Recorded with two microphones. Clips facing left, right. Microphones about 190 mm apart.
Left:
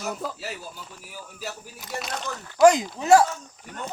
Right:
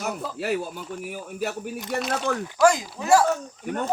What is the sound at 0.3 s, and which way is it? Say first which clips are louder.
Speech: right 10 dB; 60° right (ahead or behind).